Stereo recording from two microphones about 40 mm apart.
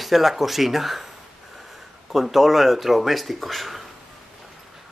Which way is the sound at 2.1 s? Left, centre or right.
Centre.